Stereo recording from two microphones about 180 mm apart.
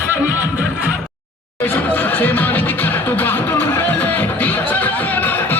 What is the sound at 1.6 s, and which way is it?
Music, 10° left (ahead or behind).